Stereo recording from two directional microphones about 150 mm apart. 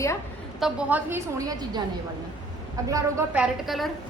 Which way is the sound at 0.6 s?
10° right (ahead or behind).